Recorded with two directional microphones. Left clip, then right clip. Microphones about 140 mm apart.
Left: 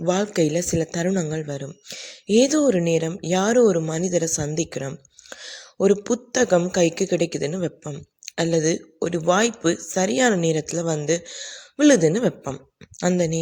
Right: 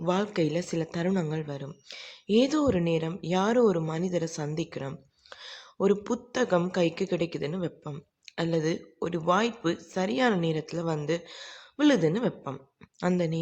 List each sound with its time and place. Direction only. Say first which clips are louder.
0.0 s a woman's voice: left 6 dB; 30° left (ahead or behind)